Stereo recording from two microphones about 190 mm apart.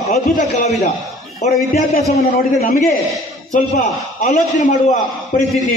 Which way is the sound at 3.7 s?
40° left (ahead or behind).